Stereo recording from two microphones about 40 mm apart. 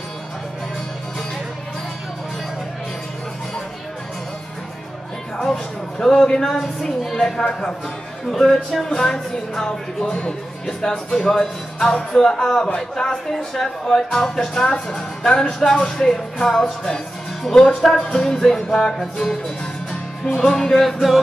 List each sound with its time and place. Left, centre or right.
5.4 s speech: centre
6.6 s a woman's voice: centre
7.2 s a woman's voice: centre
15.2 s speech: centre
16.3 s music: centre
18.1 s speech: centre
19.9 s music: centre